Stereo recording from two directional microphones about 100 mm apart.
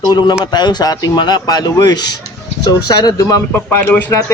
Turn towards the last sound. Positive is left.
turn(degrees=20)  # may be behind; listen again after turning